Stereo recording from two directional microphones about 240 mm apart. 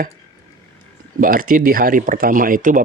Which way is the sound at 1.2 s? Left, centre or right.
Right.